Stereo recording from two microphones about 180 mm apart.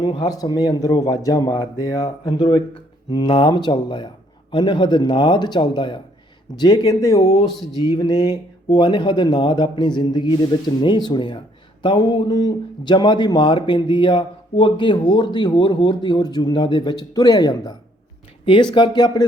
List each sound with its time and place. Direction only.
0.0 s speech: 25° left (ahead or behind)